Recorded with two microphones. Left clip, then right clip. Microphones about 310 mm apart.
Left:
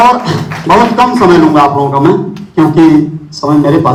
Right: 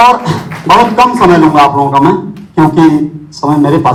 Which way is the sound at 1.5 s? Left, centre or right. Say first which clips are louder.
Right 1 dB; right.